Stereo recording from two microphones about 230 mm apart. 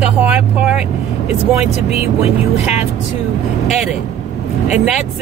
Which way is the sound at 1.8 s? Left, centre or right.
Left.